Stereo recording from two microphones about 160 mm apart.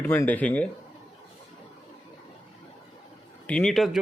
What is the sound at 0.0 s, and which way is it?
Speech, 10° left (ahead or behind).